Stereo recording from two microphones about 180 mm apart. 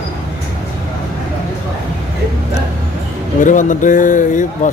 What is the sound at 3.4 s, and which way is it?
A man's voice, 45° left (ahead or behind).